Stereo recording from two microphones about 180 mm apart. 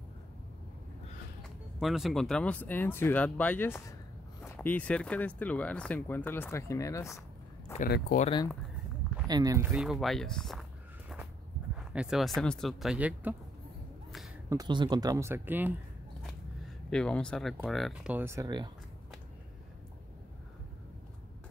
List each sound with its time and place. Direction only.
1.8 s speech: centre (ahead or behind); by 7.2 s 15° left (ahead or behind)
8.1 s speech: 50° left (ahead or behind)
9.3 s speech: 20° right (ahead or behind)
9.7 s speech: centre (ahead or behind)
11.9 s speech: 5° right (ahead or behind)
14.5 s speech: 25° right (ahead or behind)
16.9 s speech: 5° left (ahead or behind)
18.1 s speech: 15° right (ahead or behind)